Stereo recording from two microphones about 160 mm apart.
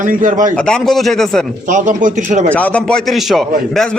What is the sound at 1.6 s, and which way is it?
Speech, 55° right (ahead or behind).